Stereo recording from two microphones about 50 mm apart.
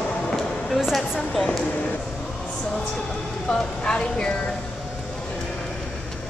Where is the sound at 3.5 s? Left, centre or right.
Centre.